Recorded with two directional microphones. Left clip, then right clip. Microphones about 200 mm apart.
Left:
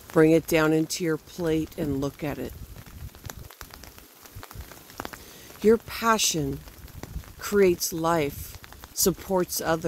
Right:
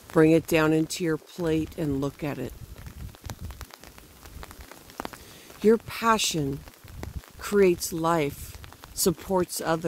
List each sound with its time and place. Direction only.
0.1 s speech: 10° right (ahead or behind)
5.0 s a sound: 45° right (ahead or behind)
5.6 s speech: 10° right (ahead or behind)